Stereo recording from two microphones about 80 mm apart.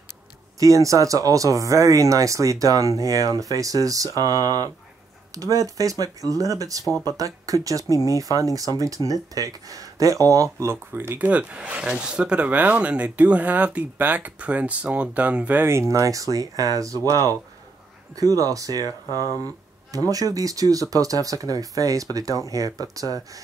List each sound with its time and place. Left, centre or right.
0.6 s speech: right
11.1 s speech: centre
15.6 s speech: right